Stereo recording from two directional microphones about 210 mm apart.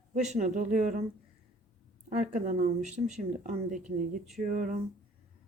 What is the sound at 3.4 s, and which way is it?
Speech, 35° right (ahead or behind).